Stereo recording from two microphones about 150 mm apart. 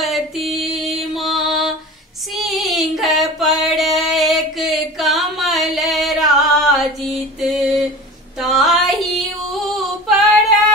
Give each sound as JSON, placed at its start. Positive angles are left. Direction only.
{"t": 0.0, "sound": "music", "side_deg": 0}
{"t": 2.3, "sound": "female singing", "side_deg": 0}